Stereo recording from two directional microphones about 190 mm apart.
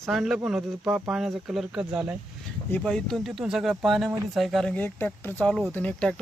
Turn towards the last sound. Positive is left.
turn(degrees=5)  # may be behind; listen again after turning